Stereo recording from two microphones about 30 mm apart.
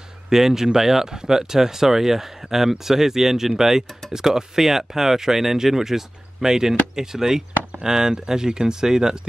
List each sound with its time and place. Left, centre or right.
0.3 s speech: centre